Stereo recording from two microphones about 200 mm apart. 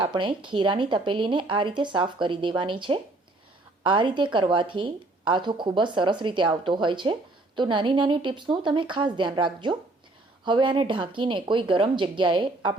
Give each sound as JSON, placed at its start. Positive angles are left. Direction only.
{"t": 0.0, "sound": "speech", "side_deg": -25}